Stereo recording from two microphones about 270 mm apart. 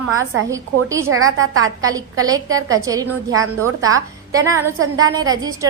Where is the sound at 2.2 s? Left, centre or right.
Centre.